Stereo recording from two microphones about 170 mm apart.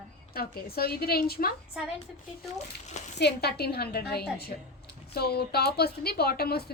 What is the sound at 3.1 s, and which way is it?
A woman's voice, 75° left (ahead or behind).